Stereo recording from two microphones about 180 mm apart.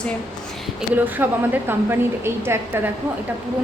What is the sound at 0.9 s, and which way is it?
A woman's voice, 10° right (ahead or behind).